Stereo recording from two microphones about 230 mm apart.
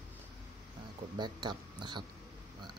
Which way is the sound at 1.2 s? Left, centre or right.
Centre.